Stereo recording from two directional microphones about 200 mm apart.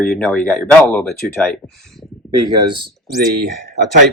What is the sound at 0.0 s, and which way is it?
Speech, centre (ahead or behind).